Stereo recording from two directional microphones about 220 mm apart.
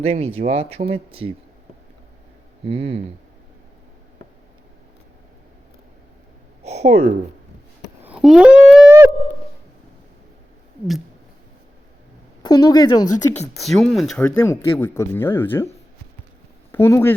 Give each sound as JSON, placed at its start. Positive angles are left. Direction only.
{"t": 0.0, "sound": "speech", "side_deg": -30}
{"t": 2.6, "sound": "speech", "side_deg": -25}
{"t": 6.6, "sound": "a sound", "side_deg": -30}
{"t": 8.0, "sound": "a sound", "side_deg": -5}
{"t": 12.4, "sound": "speech", "side_deg": 20}
{"t": 13.6, "sound": "speech", "side_deg": 0}
{"t": 14.3, "sound": "speech", "side_deg": 15}
{"t": 16.7, "sound": "speech", "side_deg": 10}